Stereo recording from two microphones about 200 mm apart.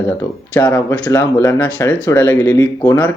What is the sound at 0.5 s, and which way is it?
Speech, 15° left (ahead or behind).